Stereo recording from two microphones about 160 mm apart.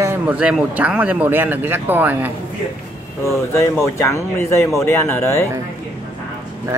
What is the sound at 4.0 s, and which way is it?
Speech, 15° left (ahead or behind).